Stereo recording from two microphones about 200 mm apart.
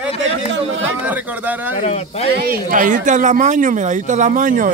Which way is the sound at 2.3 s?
45° right (ahead or behind).